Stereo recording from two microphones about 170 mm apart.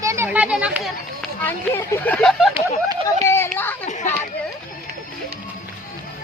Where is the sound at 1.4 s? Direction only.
10° left (ahead or behind).